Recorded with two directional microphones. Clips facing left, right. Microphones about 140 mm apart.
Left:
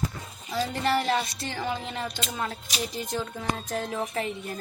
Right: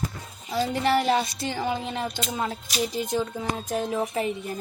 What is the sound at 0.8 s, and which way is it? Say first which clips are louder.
A woman's voice: right 3 dB; 10° right (ahead or behind).